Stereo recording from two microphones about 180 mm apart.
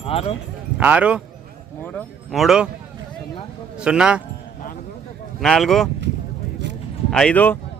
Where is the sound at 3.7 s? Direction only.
5° right (ahead or behind).